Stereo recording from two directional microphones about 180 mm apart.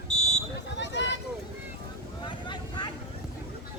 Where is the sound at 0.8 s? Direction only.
85° left.